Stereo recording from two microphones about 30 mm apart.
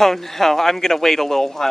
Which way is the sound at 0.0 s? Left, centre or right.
Centre.